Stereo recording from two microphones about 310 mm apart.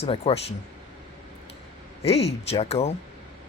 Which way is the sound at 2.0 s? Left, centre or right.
Centre.